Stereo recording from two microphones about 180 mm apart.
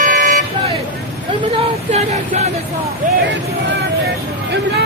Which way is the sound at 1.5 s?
35° right (ahead or behind).